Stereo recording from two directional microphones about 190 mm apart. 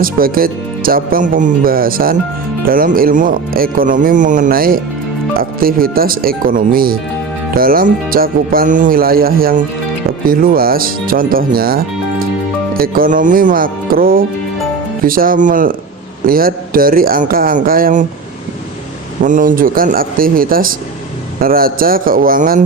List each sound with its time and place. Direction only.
0.0 s speech: 50° right (ahead or behind)
19.2 s speech: 45° right (ahead or behind)